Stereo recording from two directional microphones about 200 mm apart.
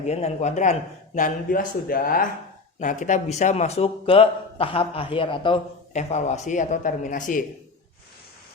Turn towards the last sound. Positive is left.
turn(degrees=40)  # may be behind; listen again after turning